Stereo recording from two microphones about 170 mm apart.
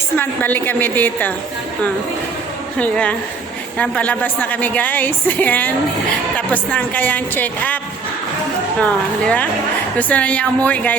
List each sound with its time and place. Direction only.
0.2 s a woman's voice: 10° left (ahead or behind)
2.7 s a woman's voice: 5° left (ahead or behind)
8.8 s a woman's voice: 10° left (ahead or behind)